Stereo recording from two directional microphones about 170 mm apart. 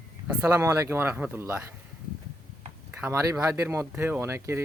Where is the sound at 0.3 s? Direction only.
15° right (ahead or behind).